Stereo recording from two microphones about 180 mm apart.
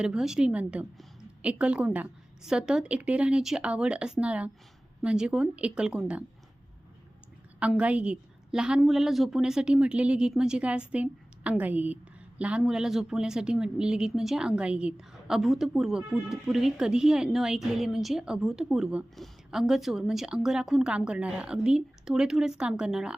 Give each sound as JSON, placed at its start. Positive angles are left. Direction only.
{"t": 0.0, "sound": "a woman's voice", "side_deg": -5}
{"t": 7.6, "sound": "a woman's voice", "side_deg": -5}